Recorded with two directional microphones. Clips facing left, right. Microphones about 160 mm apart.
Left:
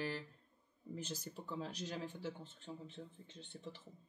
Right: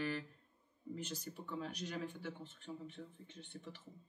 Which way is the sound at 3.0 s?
30° left (ahead or behind).